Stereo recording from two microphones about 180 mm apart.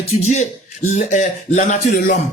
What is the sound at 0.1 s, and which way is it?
A man's voice, 40° left (ahead or behind).